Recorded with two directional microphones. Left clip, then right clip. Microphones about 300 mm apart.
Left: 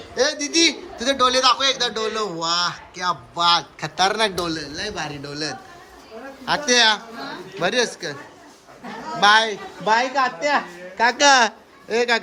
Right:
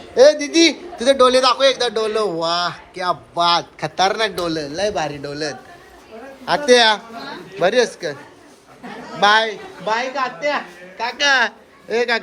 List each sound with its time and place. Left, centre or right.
0.2 s a man's voice: centre
9.2 s a man's voice: centre
9.8 s speech: left
11.3 s a man's voice: centre